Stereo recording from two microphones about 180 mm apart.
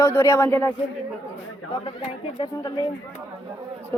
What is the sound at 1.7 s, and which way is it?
Speech, 30° left (ahead or behind).